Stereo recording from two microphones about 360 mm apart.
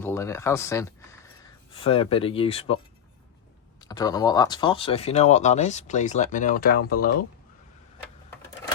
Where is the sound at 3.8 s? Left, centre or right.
Centre.